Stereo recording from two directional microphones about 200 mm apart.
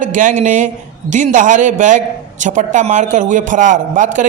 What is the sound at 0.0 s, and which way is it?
A man's voice, 40° right (ahead or behind).